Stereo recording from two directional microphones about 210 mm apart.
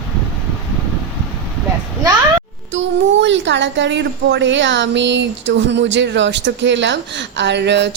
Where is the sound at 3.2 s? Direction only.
60° right (ahead or behind).